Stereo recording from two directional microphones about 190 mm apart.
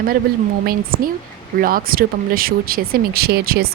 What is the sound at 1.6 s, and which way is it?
Speech, 50° right (ahead or behind).